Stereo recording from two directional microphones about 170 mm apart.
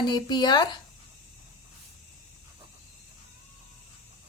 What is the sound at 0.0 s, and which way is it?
Speech, 25° left (ahead or behind).